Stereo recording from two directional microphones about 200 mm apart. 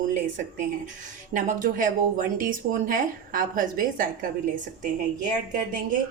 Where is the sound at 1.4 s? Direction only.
40° right (ahead or behind).